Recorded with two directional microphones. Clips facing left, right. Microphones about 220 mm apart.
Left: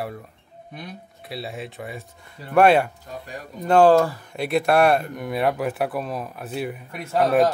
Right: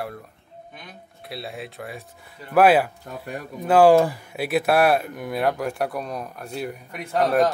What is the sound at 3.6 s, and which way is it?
Speech, 5° right (ahead or behind).